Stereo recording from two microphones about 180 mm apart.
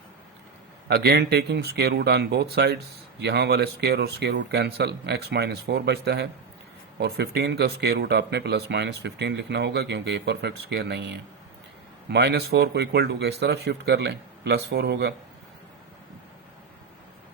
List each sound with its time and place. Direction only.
0.9 s speech: 60° right (ahead or behind)
12.0 s speech: 65° right (ahead or behind)